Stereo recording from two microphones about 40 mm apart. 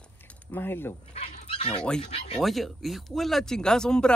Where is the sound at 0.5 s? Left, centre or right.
Left.